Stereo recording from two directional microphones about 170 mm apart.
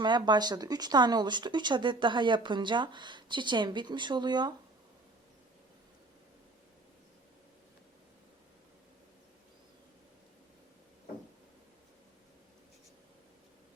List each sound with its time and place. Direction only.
0.0 s speech: 25° right (ahead or behind)